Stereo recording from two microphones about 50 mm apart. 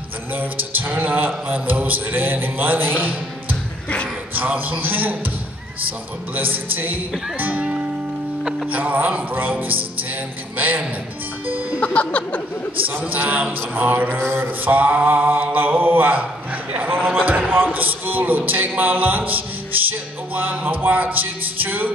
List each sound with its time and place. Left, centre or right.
0.4 s a sound: right
4.3 s music: right
8.7 s music: right
11.8 s music: left
13.0 s music: right
14.2 s a sound: right
14.6 s music: right